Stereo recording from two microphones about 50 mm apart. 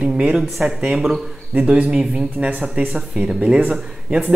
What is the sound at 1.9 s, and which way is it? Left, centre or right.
Speech, centre.